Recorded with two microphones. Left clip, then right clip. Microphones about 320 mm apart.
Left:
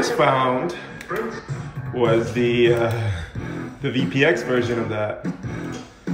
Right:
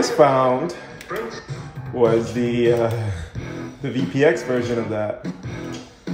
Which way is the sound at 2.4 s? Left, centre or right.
Right.